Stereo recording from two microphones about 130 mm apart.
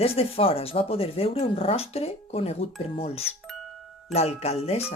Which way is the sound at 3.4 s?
Centre (ahead or behind).